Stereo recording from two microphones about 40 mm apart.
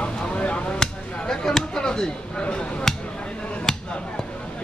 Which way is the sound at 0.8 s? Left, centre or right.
Centre.